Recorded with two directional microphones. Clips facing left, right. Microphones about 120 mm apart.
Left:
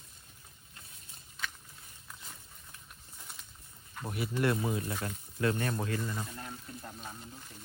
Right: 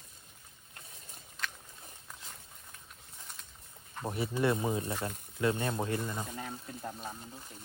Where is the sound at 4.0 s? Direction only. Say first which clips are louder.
Right 1 dB; 25° right (ahead or behind).